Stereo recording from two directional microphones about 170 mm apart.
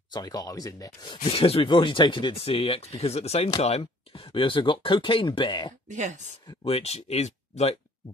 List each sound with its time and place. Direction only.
0.1 s speech: 25° left (ahead or behind)
5.9 s speech: 45° right (ahead or behind)
6.6 s speech: 35° left (ahead or behind)